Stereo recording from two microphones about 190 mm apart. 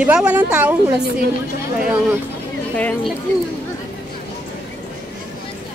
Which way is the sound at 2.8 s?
5° left (ahead or behind).